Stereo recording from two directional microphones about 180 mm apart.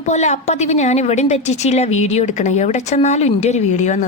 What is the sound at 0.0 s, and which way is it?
A woman's voice, 40° left (ahead or behind).